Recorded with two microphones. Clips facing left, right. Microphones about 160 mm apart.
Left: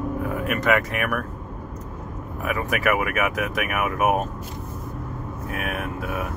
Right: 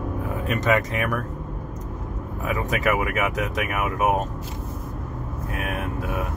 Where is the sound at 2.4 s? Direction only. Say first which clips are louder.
Even; 25° right (ahead or behind).